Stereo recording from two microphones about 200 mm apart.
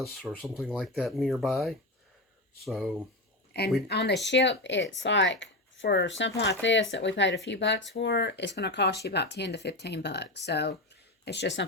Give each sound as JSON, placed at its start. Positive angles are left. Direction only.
{"t": 0.0, "sound": "speech", "side_deg": 0}
{"t": 3.8, "sound": "speech", "side_deg": 55}